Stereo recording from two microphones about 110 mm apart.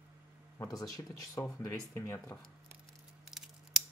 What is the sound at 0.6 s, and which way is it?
Speech, 30° left (ahead or behind).